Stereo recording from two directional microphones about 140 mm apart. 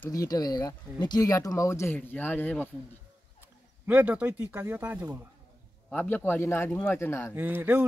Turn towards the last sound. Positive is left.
turn(degrees=-15)  # may be behind; listen again after turning